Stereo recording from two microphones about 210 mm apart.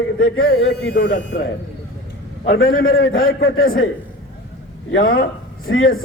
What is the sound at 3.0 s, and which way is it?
Speech, 70° left (ahead or behind).